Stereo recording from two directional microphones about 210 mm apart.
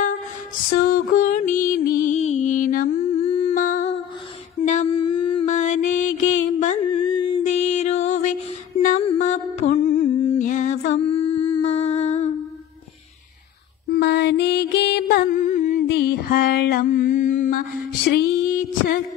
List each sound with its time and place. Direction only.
0.7 s music: 45° left (ahead or behind)
3.2 s humming: 30° left (ahead or behind)
4.6 s mantra: 30° left (ahead or behind)
7.0 s a sound: 20° left (ahead or behind)
7.4 s music: 30° left (ahead or behind)
10.2 s humming: 30° left (ahead or behind)
13.8 s mantra: 50° left (ahead or behind)
18.1 s a sound: 50° left (ahead or behind)